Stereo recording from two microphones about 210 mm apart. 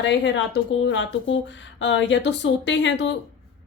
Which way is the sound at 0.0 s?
55° left (ahead or behind).